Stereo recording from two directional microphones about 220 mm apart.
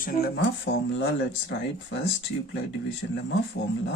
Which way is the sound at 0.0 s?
40° left (ahead or behind).